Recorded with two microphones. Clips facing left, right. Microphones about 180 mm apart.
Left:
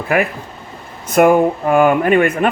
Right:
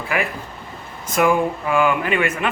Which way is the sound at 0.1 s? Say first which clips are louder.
Left 7 dB; 50° left (ahead or behind).